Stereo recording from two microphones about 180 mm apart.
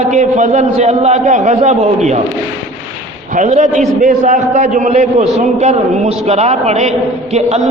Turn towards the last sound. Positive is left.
turn(degrees=-40)  # may be behind; listen again after turning